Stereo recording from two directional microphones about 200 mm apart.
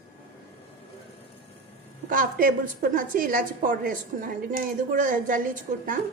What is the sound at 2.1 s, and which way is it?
A woman's voice, 45° right (ahead or behind).